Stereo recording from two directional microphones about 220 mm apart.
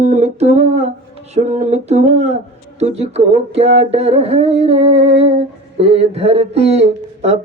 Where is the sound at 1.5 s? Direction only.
30° right (ahead or behind).